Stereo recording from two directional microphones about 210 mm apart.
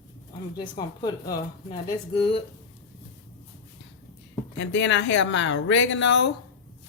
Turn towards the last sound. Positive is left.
turn(degrees=60)  # may be behind; listen again after turning